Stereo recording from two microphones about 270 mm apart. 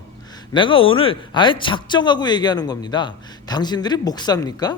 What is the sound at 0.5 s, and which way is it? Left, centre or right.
Speech, centre.